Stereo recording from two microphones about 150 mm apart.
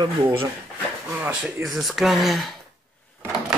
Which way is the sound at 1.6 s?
Centre (ahead or behind).